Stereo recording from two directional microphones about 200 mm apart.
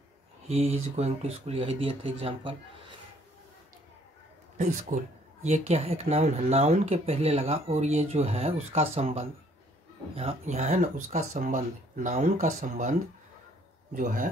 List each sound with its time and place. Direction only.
0.5 s speech: 30° right (ahead or behind)
4.6 s speech: 35° right (ahead or behind)